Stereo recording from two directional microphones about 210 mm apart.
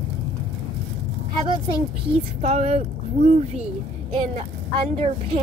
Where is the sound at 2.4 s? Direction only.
30° right (ahead or behind).